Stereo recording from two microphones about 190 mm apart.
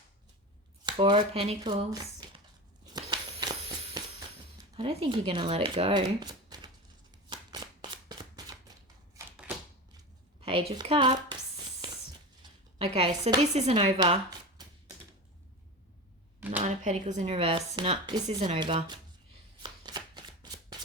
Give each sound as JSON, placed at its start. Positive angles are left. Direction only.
{"t": 0.9, "sound": "speech", "side_deg": -25}
{"t": 2.8, "sound": "a sound", "side_deg": -20}
{"t": 4.8, "sound": "speech", "side_deg": -25}
{"t": 7.3, "sound": "shuffling cards", "side_deg": -20}
{"t": 10.4, "sound": "speech", "side_deg": -30}
{"t": 11.8, "sound": "a sound", "side_deg": -25}
{"t": 13.4, "sound": "speech", "side_deg": -35}
{"t": 14.6, "sound": "typewriter", "side_deg": -20}
{"t": 16.6, "sound": "speech", "side_deg": -40}
{"t": 19.6, "sound": "shuffling cards", "side_deg": -25}